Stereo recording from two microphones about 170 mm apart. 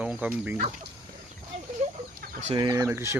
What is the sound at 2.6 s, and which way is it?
Speech, 20° right (ahead or behind).